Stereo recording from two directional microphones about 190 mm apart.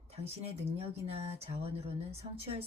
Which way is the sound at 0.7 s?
30° right (ahead or behind).